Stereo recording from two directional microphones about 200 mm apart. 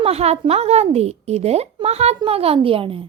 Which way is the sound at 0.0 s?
30° right (ahead or behind).